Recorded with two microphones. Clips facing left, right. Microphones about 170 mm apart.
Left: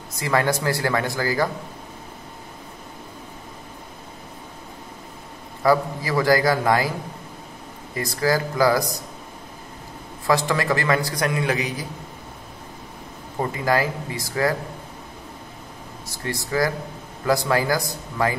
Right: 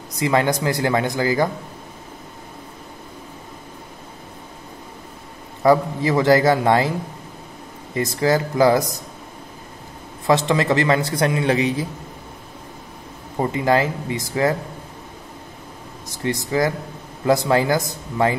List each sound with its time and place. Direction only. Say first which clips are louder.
0.2 s a man's voice: right 3 dB; 20° right (ahead or behind)
5.6 s a man's voice: right 4 dB; 25° right (ahead or behind)
7.9 s a man's voice: right 3 dB; 20° right (ahead or behind)
10.2 s a man's voice: right 3 dB; 20° right (ahead or behind)
13.4 s a man's voice: right 3 dB; 25° right (ahead or behind)
16.1 s a man's voice: right 4 dB; 20° right (ahead or behind)